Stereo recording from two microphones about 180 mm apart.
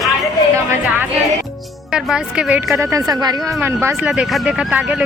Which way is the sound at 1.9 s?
5° right (ahead or behind).